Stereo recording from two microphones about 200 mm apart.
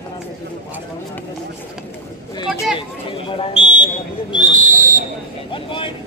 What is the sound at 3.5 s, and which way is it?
Speech, 35° right (ahead or behind).